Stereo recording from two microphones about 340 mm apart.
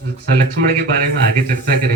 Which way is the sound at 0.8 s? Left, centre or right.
Right.